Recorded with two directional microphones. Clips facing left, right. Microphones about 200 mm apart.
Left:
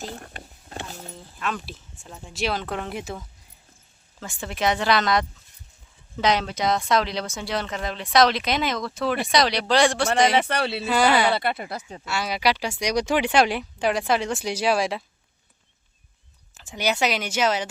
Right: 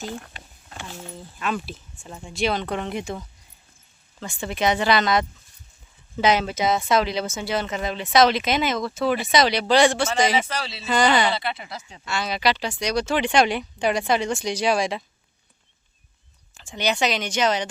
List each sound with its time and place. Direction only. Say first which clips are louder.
0.0 s a sound: right 2 dB; 35° left (ahead or behind)
1.4 s speech: right 3 dB; 5° right (ahead or behind)
10.3 s speech: left 3 dB; 60° left (ahead or behind)
10.8 s speech: right 1 dB; 5° left (ahead or behind)
11.3 s speech: left 3 dB; 55° left (ahead or behind)
12.0 s speech: even; 10° left (ahead or behind)
16.6 s speech: even; 5° left (ahead or behind)